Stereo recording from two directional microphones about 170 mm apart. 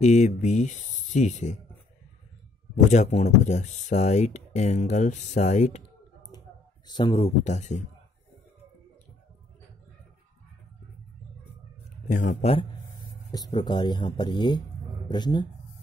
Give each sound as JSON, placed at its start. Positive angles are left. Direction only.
{"t": 0.0, "sound": "speech", "side_deg": 45}
{"t": 2.7, "sound": "speech", "side_deg": 45}
{"t": 6.9, "sound": "speech", "side_deg": 30}
{"t": 12.1, "sound": "speech", "side_deg": 50}
{"t": 13.3, "sound": "speech", "side_deg": 25}